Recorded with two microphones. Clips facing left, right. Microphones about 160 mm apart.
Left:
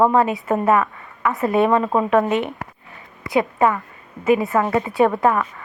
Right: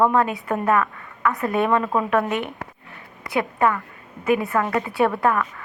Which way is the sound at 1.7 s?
25° left (ahead or behind).